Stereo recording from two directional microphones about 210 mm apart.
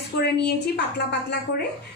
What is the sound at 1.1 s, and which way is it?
Speech, 50° left (ahead or behind).